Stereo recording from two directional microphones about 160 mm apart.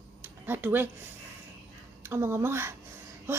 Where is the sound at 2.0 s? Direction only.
15° right (ahead or behind).